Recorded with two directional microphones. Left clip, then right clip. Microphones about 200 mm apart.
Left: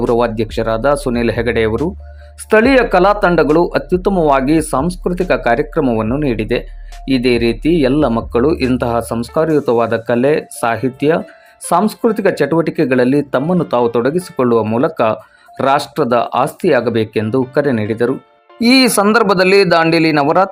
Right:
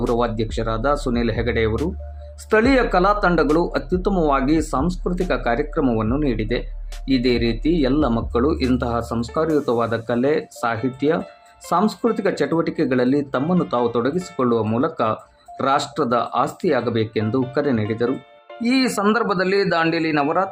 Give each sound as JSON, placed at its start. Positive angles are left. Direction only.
{"t": 0.2, "sound": "speech", "side_deg": 20}